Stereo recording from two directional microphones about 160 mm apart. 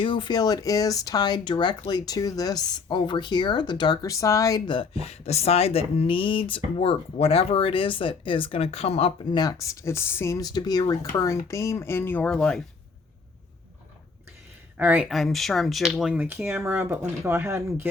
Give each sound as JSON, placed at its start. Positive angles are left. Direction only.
{"t": 0.0, "sound": "speech", "side_deg": 30}
{"t": 9.4, "sound": "speech", "side_deg": 20}
{"t": 14.8, "sound": "speech", "side_deg": -10}
{"t": 15.1, "sound": "speech", "side_deg": 0}